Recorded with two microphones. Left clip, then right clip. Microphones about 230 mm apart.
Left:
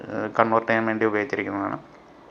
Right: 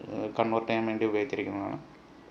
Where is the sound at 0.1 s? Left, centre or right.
Centre.